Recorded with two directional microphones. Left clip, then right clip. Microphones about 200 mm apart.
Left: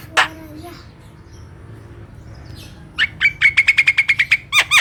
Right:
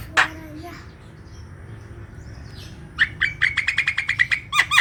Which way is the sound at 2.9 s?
20° left (ahead or behind).